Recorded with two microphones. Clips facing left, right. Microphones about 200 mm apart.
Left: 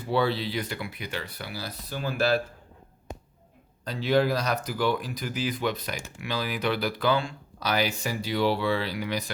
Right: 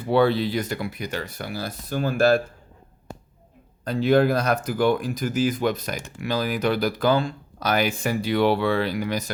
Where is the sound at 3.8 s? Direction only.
50° right (ahead or behind).